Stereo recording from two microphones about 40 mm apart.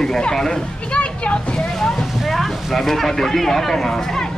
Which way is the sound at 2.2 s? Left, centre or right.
Centre.